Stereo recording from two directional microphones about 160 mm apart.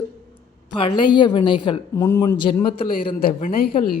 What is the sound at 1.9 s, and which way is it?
Speech, 15° left (ahead or behind).